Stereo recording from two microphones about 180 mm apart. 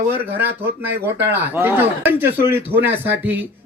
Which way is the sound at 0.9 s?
70° right (ahead or behind).